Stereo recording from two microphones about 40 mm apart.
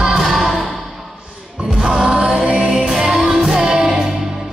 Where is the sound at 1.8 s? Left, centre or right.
Centre.